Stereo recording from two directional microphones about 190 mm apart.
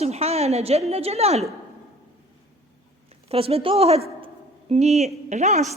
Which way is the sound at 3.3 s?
30° right (ahead or behind).